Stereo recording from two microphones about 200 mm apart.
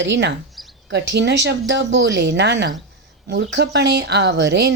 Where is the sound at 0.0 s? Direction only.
60° right (ahead or behind).